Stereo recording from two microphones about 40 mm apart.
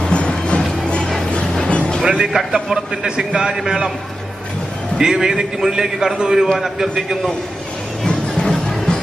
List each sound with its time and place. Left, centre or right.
0.0 s music: left
2.1 s a man's voice: centre
4.9 s a man's voice: centre
8.0 s music: centre